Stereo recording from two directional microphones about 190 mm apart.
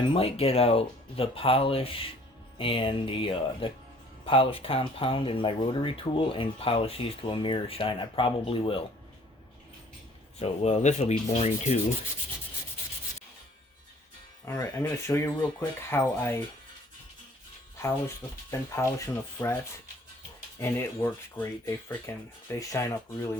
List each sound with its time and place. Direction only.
0.1 s speech: 30° left (ahead or behind)
10.4 s speech: 35° left (ahead or behind)
14.4 s speech: 15° left (ahead or behind)
18.8 s speech: 15° left (ahead or behind)
20.6 s speech: 15° left (ahead or behind)